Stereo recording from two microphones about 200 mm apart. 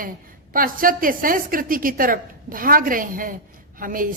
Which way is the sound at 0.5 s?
45° right (ahead or behind).